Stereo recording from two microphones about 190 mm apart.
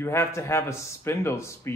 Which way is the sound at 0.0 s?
15° left (ahead or behind).